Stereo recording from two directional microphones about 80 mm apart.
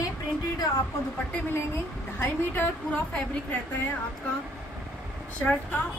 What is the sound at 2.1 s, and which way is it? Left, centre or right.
Speech, left.